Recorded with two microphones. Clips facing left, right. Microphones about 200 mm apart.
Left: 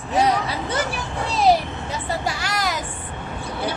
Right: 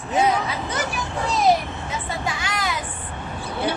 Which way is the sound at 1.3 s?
30° left (ahead or behind).